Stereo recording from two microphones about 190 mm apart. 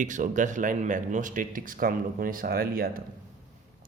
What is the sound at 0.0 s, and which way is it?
Speech, 40° right (ahead or behind).